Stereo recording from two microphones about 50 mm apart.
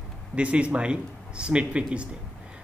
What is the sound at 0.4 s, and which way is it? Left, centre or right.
Speech, right.